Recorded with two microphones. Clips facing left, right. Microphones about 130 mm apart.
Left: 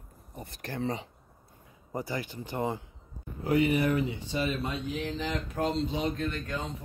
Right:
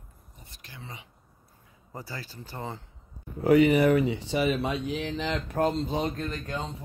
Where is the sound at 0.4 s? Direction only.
55° left (ahead or behind).